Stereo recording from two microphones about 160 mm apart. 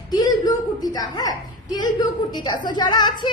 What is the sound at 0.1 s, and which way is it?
A woman's voice, 25° left (ahead or behind).